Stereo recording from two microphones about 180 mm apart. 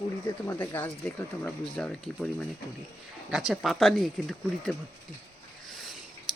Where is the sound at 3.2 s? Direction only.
5° right (ahead or behind).